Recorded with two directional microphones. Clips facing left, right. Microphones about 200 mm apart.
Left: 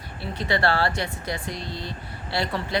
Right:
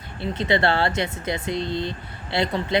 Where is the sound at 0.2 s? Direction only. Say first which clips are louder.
Right 3 dB; 20° right (ahead or behind).